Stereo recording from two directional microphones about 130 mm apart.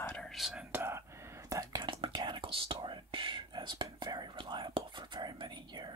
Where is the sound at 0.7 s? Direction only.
20° right (ahead or behind).